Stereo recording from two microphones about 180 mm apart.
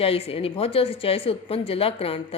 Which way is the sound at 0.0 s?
35° left (ahead or behind).